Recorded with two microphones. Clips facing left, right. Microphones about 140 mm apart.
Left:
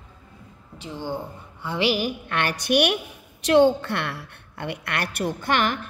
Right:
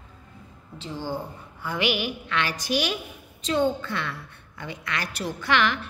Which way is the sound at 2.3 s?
55° left (ahead or behind).